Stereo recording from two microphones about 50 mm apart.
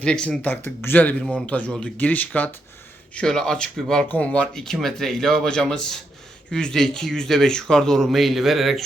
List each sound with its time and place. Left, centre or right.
0.0 s speech: centre
0.6 s speech: left
1.5 s speech: left
3.2 s speech: centre
4.1 s speech: left
4.5 s speech: centre